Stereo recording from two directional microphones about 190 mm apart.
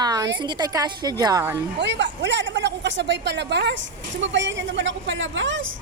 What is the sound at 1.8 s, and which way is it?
A woman's voice, 70° right (ahead or behind).